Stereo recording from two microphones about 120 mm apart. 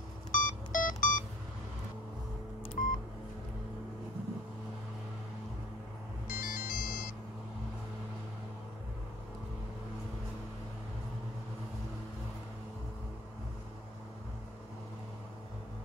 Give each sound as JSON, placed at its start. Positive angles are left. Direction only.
{"t": 0.3, "sound": "music", "side_deg": 90}
{"t": 2.8, "sound": "telephone dialing", "side_deg": 90}
{"t": 6.2, "sound": "ringtone", "side_deg": 90}